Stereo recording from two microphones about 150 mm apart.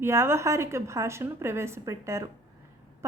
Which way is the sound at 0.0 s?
15° right (ahead or behind).